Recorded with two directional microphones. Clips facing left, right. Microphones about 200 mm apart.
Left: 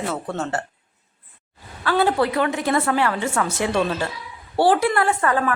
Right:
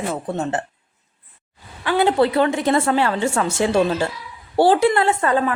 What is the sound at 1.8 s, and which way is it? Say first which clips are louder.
A woman's voice: right 3 dB; 15° right (ahead or behind).